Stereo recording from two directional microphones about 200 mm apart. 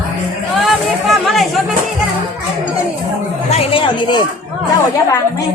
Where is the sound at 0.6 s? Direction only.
Centre (ahead or behind).